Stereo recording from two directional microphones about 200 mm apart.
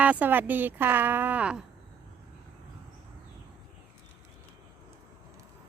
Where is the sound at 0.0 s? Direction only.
5° right (ahead or behind).